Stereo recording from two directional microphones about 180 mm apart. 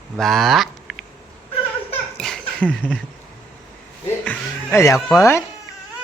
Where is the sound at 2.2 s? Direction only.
5° left (ahead or behind).